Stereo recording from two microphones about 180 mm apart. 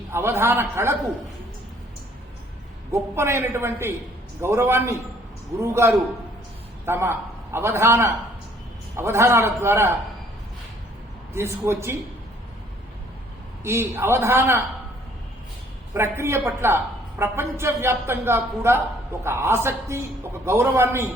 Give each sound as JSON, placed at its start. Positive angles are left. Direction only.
{"t": 0.1, "sound": "a woman's voice", "side_deg": -15}
{"t": 2.9, "sound": "a woman's voice", "side_deg": -15}
{"t": 11.3, "sound": "a woman's voice", "side_deg": -15}
{"t": 13.7, "sound": "a woman's voice", "side_deg": -15}
{"t": 16.0, "sound": "a woman's voice", "side_deg": -15}